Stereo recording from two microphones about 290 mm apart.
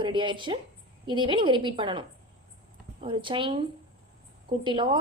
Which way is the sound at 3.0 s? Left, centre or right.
Centre.